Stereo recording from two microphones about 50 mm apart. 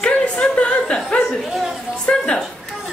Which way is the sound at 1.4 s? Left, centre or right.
Centre.